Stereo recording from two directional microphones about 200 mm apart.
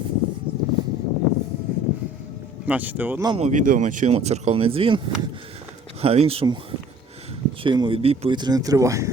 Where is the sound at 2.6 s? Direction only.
10° right (ahead or behind).